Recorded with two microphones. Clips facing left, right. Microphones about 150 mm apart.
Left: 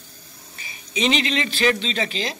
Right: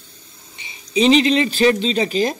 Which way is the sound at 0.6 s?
30° right (ahead or behind).